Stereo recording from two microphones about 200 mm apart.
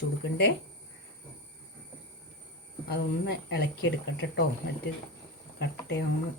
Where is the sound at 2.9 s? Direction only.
55° left (ahead or behind).